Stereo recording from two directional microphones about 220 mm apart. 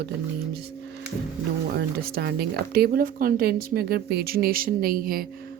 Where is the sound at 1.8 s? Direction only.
45° right (ahead or behind).